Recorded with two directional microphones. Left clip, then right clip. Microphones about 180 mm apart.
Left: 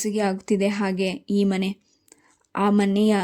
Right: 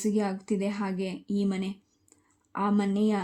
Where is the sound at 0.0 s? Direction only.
30° left (ahead or behind).